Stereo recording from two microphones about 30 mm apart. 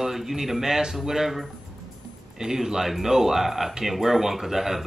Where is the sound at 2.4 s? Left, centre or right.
Centre.